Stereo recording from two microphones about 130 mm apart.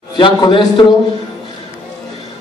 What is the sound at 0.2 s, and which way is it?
Speech, 35° left (ahead or behind).